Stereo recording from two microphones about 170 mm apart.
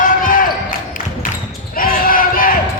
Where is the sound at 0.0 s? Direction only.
50° left (ahead or behind).